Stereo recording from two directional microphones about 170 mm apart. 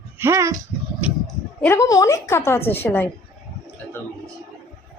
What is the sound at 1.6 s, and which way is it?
A woman's voice, 15° left (ahead or behind).